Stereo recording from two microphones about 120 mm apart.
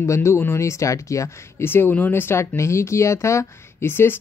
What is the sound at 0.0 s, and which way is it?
Speech, 25° left (ahead or behind).